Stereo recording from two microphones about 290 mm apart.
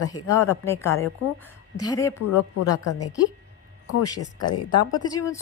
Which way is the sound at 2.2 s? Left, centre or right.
Left.